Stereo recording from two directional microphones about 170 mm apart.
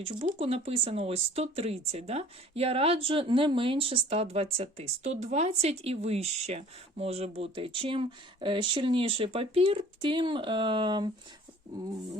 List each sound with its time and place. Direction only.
0.0 s speech: 35° right (ahead or behind)